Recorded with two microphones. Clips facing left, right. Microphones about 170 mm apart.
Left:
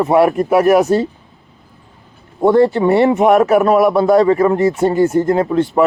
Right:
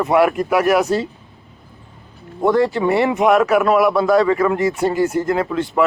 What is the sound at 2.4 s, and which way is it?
A man's voice, 25° left (ahead or behind).